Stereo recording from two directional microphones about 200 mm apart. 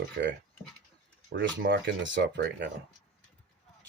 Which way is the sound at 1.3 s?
60° right (ahead or behind).